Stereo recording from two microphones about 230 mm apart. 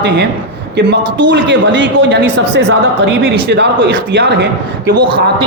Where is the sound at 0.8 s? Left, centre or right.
Right.